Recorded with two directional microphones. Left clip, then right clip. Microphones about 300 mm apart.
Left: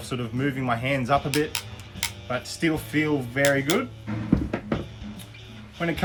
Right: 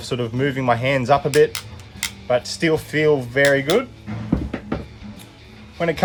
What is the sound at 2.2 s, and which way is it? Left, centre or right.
Speech, right.